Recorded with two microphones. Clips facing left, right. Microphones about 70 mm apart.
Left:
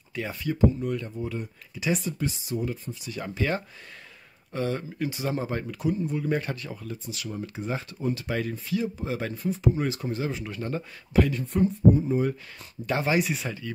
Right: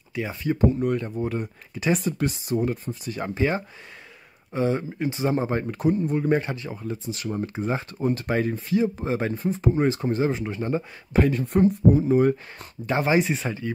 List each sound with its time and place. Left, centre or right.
0.3 s speech: right
0.6 s speech: right
4.5 s speech: right
6.4 s speech: right
8.0 s speech: right
11.3 s speech: right
12.8 s speech: right